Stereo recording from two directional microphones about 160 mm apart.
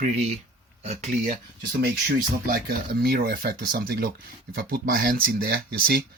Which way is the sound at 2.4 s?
65° right (ahead or behind).